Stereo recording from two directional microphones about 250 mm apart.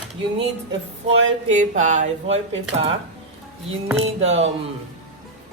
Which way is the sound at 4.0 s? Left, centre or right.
Right.